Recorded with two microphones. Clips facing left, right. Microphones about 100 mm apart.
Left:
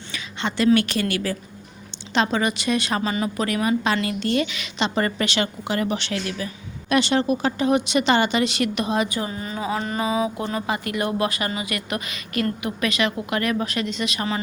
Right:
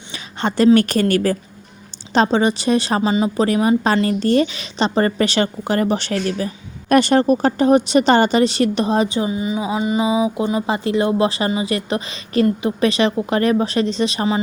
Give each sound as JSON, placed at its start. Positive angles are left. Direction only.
{"t": 0.3, "sound": "a woman's voice", "side_deg": -40}
{"t": 2.1, "sound": "a woman's voice", "side_deg": -30}
{"t": 3.0, "sound": "a woman's voice", "side_deg": -20}
{"t": 6.8, "sound": "a woman's voice", "side_deg": -50}
{"t": 9.3, "sound": "mantra", "side_deg": -10}
{"t": 10.7, "sound": "a woman's voice", "side_deg": -25}